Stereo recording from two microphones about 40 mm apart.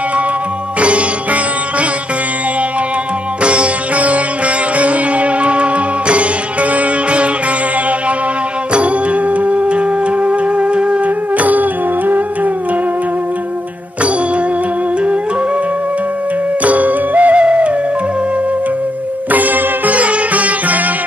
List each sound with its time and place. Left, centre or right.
0.7 s music: right
3.4 s sitar: right
4.7 s music: right
8.7 s music: right
16.6 s music: right
17.4 s music: right
19.3 s music: right